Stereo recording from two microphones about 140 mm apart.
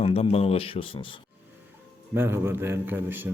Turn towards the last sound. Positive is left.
turn(degrees=-15)  # may be behind; listen again after turning